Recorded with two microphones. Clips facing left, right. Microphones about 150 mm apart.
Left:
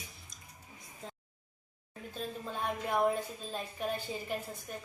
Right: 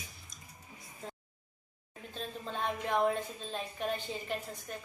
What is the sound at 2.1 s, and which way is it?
Music, 10° left (ahead or behind).